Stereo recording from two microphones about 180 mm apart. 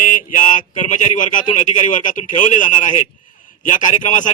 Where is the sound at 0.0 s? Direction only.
50° left (ahead or behind).